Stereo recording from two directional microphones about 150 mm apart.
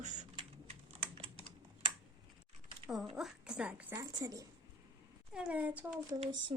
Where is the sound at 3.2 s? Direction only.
5° right (ahead or behind).